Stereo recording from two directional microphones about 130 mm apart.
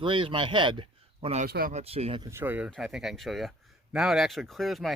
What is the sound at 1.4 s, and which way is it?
Speech, 60° right (ahead or behind).